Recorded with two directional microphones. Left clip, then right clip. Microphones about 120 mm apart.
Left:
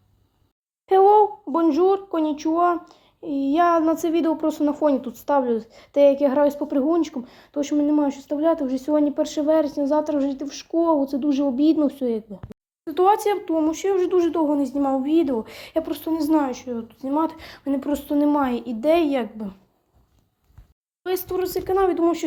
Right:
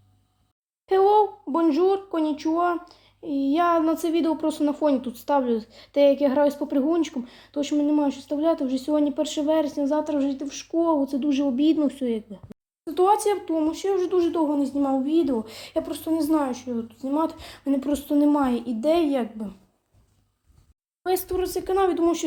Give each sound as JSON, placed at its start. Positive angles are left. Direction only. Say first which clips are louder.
{"t": 0.9, "sound": "speech", "louder": "left 4 dB", "side_deg": 20}
{"t": 13.7, "sound": "a woman's voice", "louder": "left 3 dB", "side_deg": 30}
{"t": 21.0, "sound": "a woman's voice", "louder": "even", "side_deg": 5}